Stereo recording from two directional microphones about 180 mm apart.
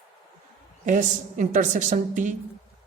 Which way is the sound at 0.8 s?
45° right (ahead or behind).